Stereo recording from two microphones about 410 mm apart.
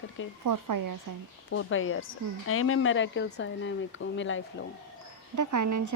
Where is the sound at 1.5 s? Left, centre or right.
Left.